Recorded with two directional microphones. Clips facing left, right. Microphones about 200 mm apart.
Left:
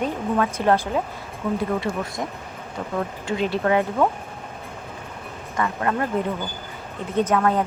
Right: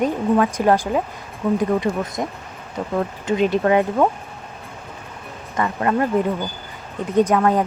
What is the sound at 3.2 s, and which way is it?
Speech, 20° right (ahead or behind).